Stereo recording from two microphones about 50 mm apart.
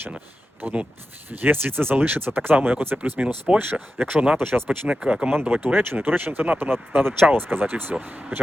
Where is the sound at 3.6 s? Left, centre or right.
Right.